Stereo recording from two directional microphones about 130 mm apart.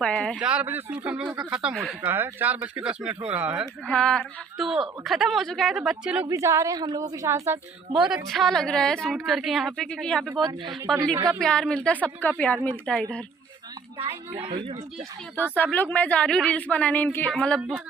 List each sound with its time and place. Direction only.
0.0 s a woman's voice: 10° left (ahead or behind)
0.3 s a woman's voice: 5° right (ahead or behind)
2.0 s speech: 15° right (ahead or behind)
3.8 s a woman's voice: 5° left (ahead or behind)
6.2 s a woman's voice: 25° right (ahead or behind)
7.9 s a woman's voice: 5° right (ahead or behind)
11.3 s a woman's voice: 5° left (ahead or behind)
14.0 s speech: 50° right (ahead or behind)
15.5 s a woman's voice: 15° left (ahead or behind)
17.6 s speech: 10° right (ahead or behind)